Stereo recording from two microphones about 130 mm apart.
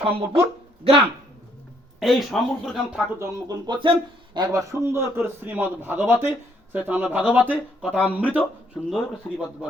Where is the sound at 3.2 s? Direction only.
30° right (ahead or behind).